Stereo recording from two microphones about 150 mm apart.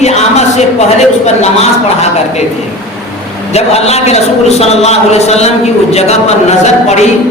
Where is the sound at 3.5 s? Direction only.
45° left (ahead or behind).